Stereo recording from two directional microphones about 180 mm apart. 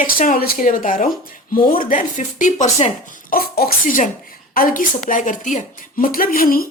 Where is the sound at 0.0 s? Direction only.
50° left (ahead or behind).